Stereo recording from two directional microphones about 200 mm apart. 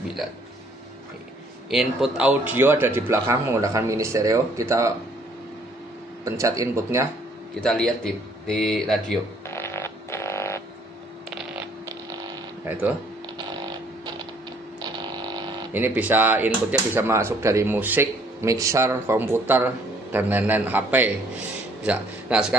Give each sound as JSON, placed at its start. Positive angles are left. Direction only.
{"t": 1.7, "sound": "speech", "side_deg": 0}
{"t": 6.2, "sound": "speech", "side_deg": -15}
{"t": 7.6, "sound": "a man's voice", "side_deg": 5}
{"t": 9.5, "sound": "fart", "side_deg": 15}
{"t": 14.8, "sound": "a sound", "side_deg": -20}
{"t": 15.7, "sound": "speech", "side_deg": -10}